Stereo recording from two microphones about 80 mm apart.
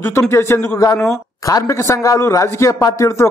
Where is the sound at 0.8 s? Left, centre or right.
Left.